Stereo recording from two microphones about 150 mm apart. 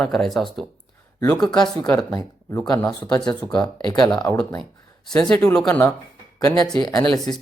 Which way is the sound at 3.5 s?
30° left (ahead or behind).